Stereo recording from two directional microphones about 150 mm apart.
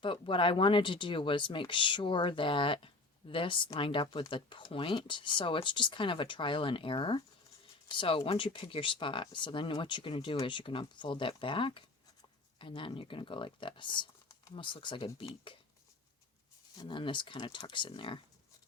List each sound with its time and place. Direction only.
0.0 s speech: 35° left (ahead or behind)
16.8 s speech: 35° left (ahead or behind)